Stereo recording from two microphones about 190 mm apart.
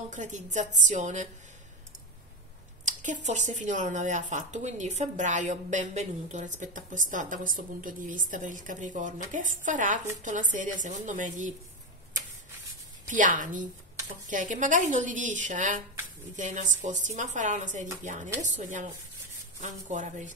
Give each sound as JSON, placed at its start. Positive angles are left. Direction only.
{"t": 0.1, "sound": "speech", "side_deg": -40}
{"t": 2.8, "sound": "speech", "side_deg": -40}
{"t": 13.1, "sound": "a woman's voice", "side_deg": -45}
{"t": 16.8, "sound": "speech", "side_deg": -40}
{"t": 19.9, "sound": "speech", "side_deg": -40}